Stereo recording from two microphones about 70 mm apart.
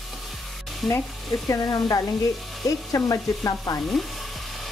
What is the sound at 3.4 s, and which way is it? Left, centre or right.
Stir, left.